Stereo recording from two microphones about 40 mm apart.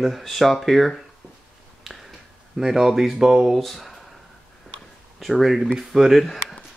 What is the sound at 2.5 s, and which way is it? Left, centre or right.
Speech, centre.